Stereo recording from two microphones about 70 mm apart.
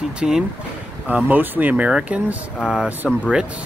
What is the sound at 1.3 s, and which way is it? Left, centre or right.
Speech, right.